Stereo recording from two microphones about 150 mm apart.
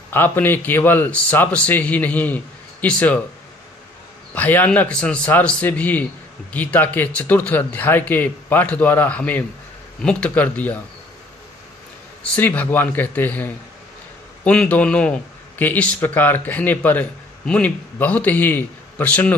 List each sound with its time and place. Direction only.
0.1 s a man's voice: 15° left (ahead or behind)
4.3 s a man's voice: 10° left (ahead or behind)
12.2 s a man's voice: 10° left (ahead or behind)